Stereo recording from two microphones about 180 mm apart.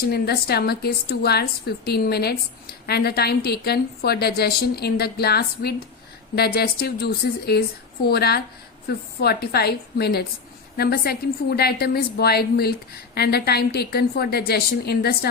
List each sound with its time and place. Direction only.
0.0 s a woman's voice: 60° left (ahead or behind)